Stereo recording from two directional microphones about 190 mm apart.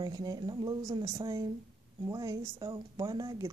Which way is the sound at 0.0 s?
20° right (ahead or behind).